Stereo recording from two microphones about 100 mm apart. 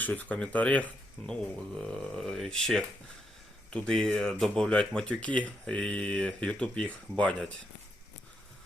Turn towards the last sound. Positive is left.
turn(degrees=10)  # may be behind; listen again after turning